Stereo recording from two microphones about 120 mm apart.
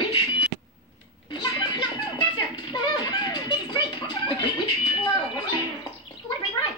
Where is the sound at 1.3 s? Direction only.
40° left (ahead or behind).